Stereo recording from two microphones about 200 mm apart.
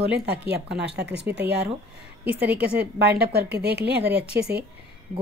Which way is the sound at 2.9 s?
55° right (ahead or behind).